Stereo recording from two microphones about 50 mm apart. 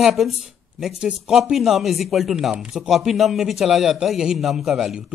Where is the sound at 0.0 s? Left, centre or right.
Centre.